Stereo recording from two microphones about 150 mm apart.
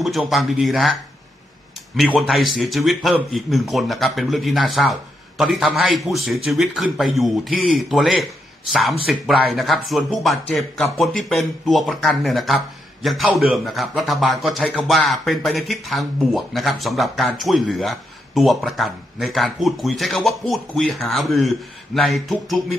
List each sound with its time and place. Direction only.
0.3 s speech: centre (ahead or behind)
2.0 s speech: centre (ahead or behind)